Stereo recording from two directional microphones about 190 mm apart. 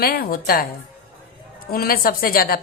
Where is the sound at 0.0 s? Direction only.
50° left (ahead or behind).